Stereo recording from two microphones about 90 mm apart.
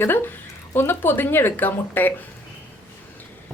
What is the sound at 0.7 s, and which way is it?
A woman's voice, 25° left (ahead or behind).